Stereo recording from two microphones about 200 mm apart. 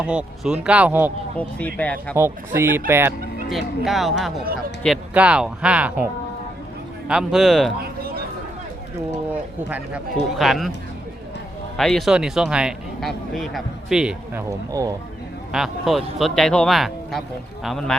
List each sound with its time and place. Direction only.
0.0 s speech: 5° right (ahead or behind)
1.4 s speech: 5° left (ahead or behind)
2.1 s speech: 10° right (ahead or behind)
3.5 s speech: centre (ahead or behind)
7.1 s speech: 5° right (ahead or behind)
7.8 s a sound: 50° right (ahead or behind)
9.3 s speech: 5° right (ahead or behind)
11.8 s speech: centre (ahead or behind)
14.7 s speech: 15° right (ahead or behind)
15.5 s speech: centre (ahead or behind)